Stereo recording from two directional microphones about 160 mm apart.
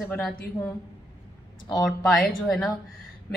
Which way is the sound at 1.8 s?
Centre (ahead or behind).